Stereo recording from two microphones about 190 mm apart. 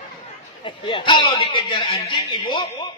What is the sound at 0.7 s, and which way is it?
Speech, 25° left (ahead or behind).